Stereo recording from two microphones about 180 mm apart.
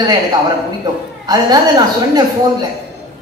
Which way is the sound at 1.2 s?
20° right (ahead or behind).